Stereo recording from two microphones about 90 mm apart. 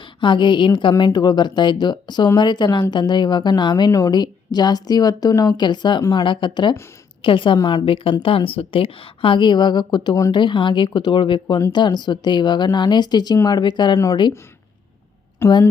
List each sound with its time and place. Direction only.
0.0 s a woman's voice: 60° left (ahead or behind)
5.3 s speech: 30° left (ahead or behind)
5.5 s a woman's voice: 55° left (ahead or behind)
15.4 s a woman's voice: 25° left (ahead or behind)